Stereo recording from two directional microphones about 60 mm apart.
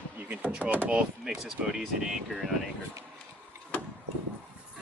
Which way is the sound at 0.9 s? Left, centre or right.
Centre.